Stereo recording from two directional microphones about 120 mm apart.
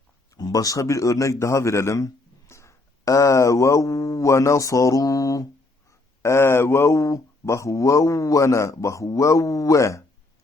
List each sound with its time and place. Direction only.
0.3 s speech: 30° left (ahead or behind)